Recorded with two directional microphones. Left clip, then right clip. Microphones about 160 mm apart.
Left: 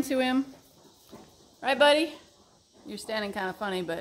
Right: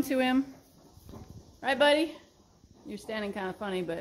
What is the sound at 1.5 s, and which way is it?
Speech, 10° left (ahead or behind).